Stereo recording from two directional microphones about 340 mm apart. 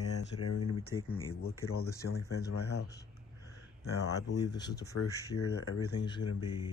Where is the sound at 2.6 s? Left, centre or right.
Left.